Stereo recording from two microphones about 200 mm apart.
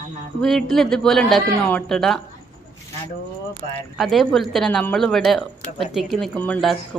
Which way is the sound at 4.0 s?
Centre (ahead or behind).